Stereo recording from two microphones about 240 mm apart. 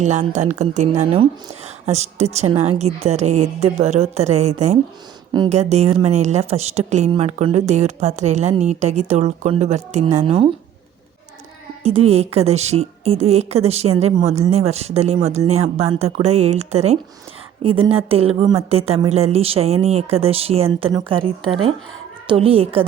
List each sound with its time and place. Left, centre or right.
0.0 s a woman's voice: right
11.8 s a woman's voice: right